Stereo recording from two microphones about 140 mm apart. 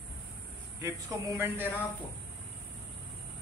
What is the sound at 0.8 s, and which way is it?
Speech, 20° right (ahead or behind).